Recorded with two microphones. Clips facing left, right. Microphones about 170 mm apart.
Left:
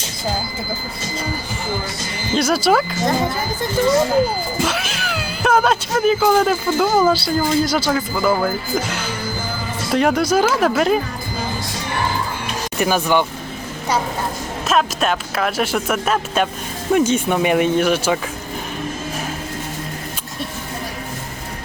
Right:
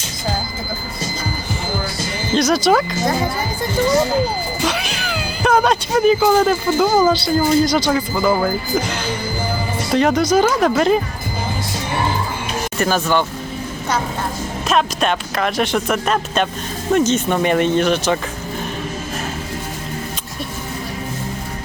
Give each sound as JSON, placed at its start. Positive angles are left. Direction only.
{"t": 2.3, "sound": "speech", "side_deg": 5}
{"t": 4.6, "sound": "speech", "side_deg": 0}
{"t": 7.6, "sound": "speech", "side_deg": 5}
{"t": 8.1, "sound": "speech", "side_deg": -10}
{"t": 12.8, "sound": "speech", "side_deg": 15}
{"t": 14.7, "sound": "speech", "side_deg": 0}